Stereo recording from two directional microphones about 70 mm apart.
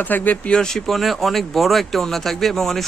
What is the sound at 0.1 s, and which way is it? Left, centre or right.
Speech, left.